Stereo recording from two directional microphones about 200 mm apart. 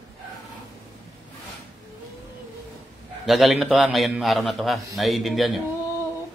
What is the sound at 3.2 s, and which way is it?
A man's voice, centre (ahead or behind).